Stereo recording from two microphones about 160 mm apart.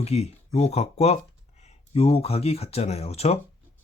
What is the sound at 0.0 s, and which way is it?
Speech, 40° left (ahead or behind).